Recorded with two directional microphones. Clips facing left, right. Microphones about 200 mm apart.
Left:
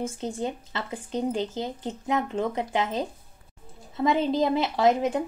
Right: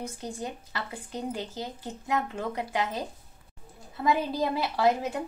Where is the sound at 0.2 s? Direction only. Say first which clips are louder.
Left 6 dB; 25° left (ahead or behind).